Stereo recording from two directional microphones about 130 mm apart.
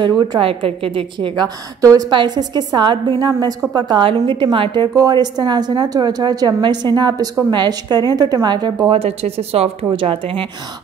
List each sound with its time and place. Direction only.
0.3 s speech: 45° right (ahead or behind)
1.8 s a woman's voice: 25° right (ahead or behind)
4.9 s a woman's voice: 30° right (ahead or behind)
8.9 s speech: 50° right (ahead or behind)